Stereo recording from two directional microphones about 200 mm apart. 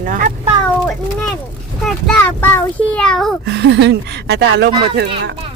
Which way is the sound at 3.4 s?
55° right (ahead or behind).